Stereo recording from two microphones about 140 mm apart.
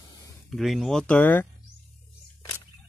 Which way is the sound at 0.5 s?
Centre (ahead or behind).